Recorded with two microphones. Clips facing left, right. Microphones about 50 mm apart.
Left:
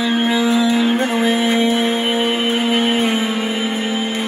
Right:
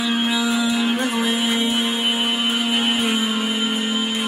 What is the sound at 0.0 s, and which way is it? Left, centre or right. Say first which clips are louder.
Music: left 4 dB; left.